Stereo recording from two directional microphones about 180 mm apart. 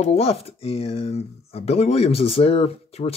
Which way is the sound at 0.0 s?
35° left (ahead or behind).